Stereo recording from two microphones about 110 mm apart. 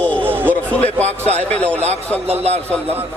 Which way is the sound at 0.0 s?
10° left (ahead or behind).